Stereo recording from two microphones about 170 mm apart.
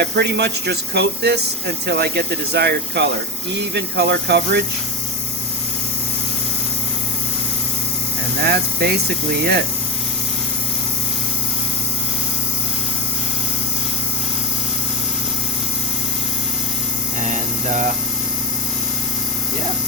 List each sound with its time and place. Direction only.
0.0 s speech: 75° right (ahead or behind)
8.4 s speech: 70° right (ahead or behind)
17.2 s a sound: 45° right (ahead or behind)